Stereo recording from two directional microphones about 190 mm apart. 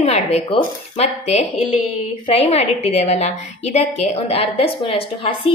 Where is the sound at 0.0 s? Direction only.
35° left (ahead or behind).